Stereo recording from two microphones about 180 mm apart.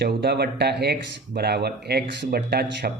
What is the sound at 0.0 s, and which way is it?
Speech, 60° right (ahead or behind).